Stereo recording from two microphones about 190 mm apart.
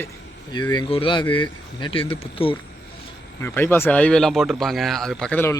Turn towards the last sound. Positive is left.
turn(degrees=10)  # may be behind; listen again after turning